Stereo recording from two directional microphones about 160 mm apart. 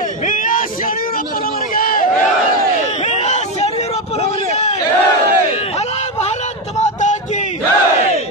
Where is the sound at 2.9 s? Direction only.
45° left (ahead or behind).